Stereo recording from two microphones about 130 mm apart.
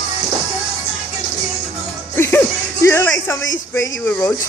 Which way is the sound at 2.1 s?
20° left (ahead or behind).